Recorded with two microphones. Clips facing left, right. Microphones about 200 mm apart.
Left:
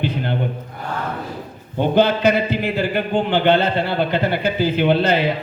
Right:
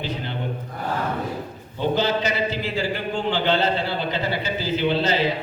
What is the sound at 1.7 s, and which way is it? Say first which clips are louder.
A man's voice: left 6 dB; 55° left (ahead or behind).